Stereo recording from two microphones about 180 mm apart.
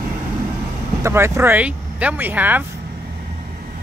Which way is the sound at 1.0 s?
15° right (ahead or behind).